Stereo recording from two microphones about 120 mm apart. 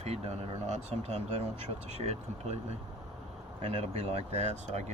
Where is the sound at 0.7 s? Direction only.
65° right (ahead or behind).